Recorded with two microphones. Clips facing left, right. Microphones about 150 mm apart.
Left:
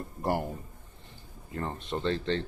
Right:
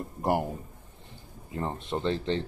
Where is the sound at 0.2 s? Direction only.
20° right (ahead or behind).